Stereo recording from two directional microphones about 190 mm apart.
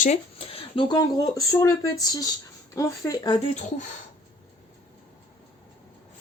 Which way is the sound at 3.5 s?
40° left (ahead or behind).